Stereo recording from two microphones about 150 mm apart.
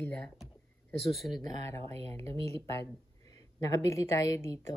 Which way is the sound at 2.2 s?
40° right (ahead or behind).